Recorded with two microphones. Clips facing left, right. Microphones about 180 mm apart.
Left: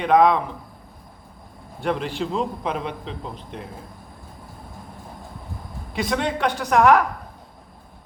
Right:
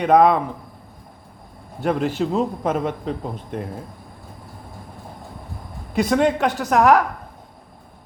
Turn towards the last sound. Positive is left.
turn(degrees=-40)  # may be behind; listen again after turning